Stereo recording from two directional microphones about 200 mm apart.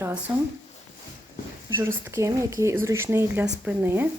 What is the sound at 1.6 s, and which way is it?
Speech, 10° right (ahead or behind).